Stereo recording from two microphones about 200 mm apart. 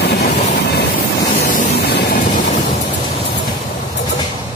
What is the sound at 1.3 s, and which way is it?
Vehicle, 40° left (ahead or behind).